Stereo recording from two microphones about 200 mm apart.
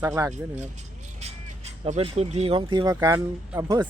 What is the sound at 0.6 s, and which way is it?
Speech, 35° right (ahead or behind).